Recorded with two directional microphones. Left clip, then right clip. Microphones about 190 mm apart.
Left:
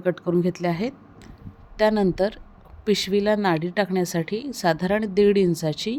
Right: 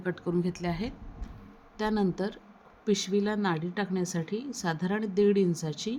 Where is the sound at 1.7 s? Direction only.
45° left (ahead or behind).